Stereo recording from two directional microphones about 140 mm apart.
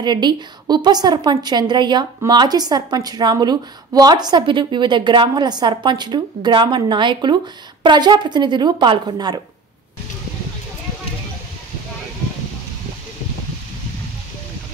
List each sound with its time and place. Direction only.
0.0 s a woman's voice: 30° right (ahead or behind)